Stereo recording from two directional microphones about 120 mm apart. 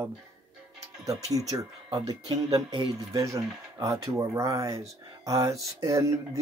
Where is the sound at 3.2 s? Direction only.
25° right (ahead or behind).